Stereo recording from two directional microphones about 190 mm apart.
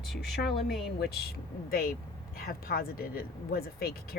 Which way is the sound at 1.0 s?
55° left (ahead or behind).